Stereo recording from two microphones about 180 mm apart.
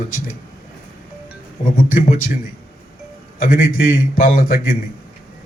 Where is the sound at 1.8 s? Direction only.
50° left (ahead or behind).